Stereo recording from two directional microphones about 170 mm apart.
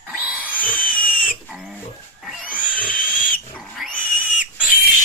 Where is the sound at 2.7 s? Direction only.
55° left (ahead or behind).